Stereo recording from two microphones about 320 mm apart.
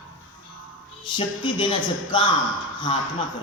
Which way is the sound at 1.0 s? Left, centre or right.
Centre.